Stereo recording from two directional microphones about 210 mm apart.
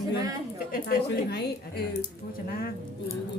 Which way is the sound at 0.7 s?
45° left (ahead or behind).